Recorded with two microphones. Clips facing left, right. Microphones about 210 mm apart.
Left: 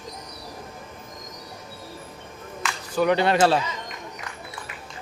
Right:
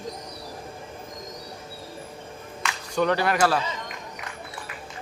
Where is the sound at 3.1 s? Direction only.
25° left (ahead or behind).